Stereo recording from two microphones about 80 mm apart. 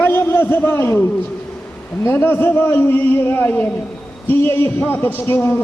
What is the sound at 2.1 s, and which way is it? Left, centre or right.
A man's voice, left.